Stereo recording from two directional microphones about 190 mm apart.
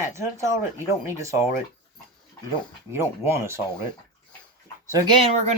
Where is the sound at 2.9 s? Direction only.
15° right (ahead or behind).